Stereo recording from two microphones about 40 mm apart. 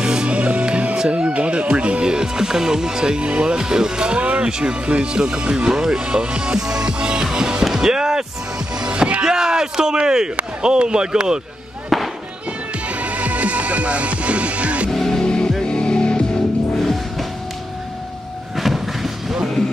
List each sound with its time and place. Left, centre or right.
0.0 s music: right
0.9 s speech: right
7.3 s music: right
10.6 s speech: right
11.9 s fireworks: centre
12.8 s music: right
14.9 s music: centre
15.1 s music: left
16.7 s music: centre
18.6 s vehicle: centre